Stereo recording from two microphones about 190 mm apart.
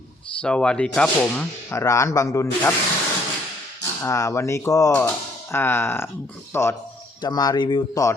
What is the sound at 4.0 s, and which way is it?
Speech, 15° left (ahead or behind).